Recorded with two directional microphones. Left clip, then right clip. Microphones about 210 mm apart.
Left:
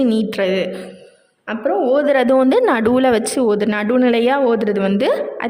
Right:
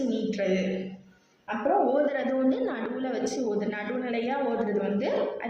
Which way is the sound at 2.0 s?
50° left (ahead or behind).